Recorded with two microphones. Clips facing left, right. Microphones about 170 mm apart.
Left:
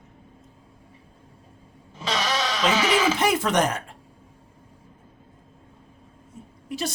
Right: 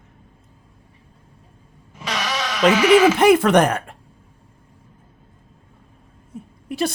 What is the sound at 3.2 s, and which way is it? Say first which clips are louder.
Speech: right 8 dB; 60° right (ahead or behind).